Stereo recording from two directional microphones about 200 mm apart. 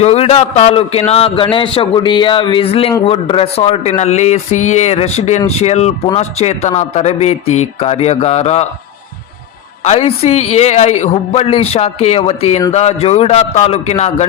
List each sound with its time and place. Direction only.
0.0 s speech: 30° left (ahead or behind)
9.8 s speech: 35° left (ahead or behind)